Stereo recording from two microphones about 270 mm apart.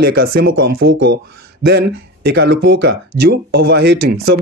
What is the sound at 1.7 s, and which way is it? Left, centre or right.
Speech, right.